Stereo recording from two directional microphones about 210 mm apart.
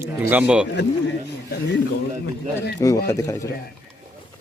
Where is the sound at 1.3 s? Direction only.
55° left (ahead or behind).